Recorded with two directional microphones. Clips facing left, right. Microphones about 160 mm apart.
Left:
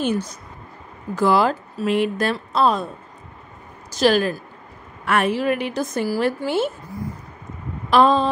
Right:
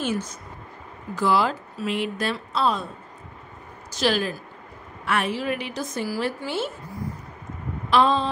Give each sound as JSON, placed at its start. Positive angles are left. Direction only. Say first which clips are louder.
{"t": 1.1, "sound": "a woman's voice", "louder": "left 4 dB", "side_deg": 45}
{"t": 3.9, "sound": "a woman's voice", "louder": "left 6 dB", "side_deg": 45}
{"t": 7.9, "sound": "a woman's voice", "louder": "left 4 dB", "side_deg": 45}